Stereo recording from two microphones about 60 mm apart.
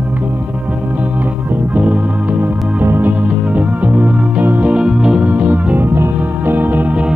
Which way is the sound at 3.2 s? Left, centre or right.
Right.